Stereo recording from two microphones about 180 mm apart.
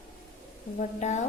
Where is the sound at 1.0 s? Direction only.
40° left (ahead or behind).